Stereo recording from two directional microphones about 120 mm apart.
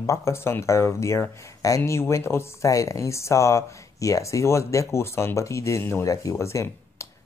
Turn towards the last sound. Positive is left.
turn(degrees=25)  # may be behind; listen again after turning